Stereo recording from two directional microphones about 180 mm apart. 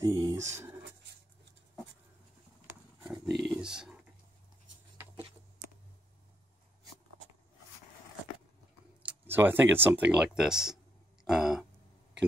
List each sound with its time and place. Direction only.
0.0 s speech: 20° right (ahead or behind)
3.0 s wild animals: 5° right (ahead or behind)
3.4 s a sound: 5° right (ahead or behind)
9.0 s speech: 10° right (ahead or behind)
11.2 s throat clearing: centre (ahead or behind)